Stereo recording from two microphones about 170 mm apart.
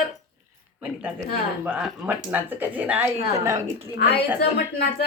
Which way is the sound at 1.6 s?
5° right (ahead or behind).